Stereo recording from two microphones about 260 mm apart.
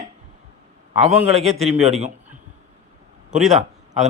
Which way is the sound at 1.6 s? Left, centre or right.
Right.